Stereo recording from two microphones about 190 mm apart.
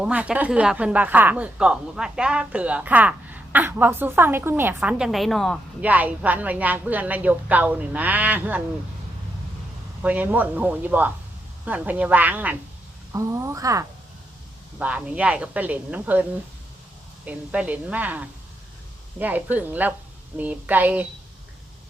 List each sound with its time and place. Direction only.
0.0 s a woman's voice: 5° right (ahead or behind)
10.0 s a woman's voice: 10° right (ahead or behind)
17.2 s a woman's voice: 5° right (ahead or behind)